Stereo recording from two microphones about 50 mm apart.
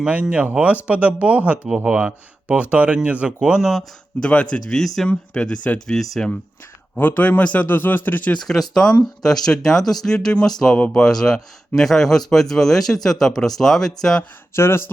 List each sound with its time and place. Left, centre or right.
0.1 s speech: right
1.6 s speech: centre
1.9 s speech: right
3.6 s speech: centre
4.2 s speech: left
4.7 s speech: centre
5.0 s speech: centre
7.0 s a man's voice: left
7.7 s a man's voice: left
8.4 s speech: centre
10.8 s speech: left
11.0 s speech: centre
14.5 s speech: left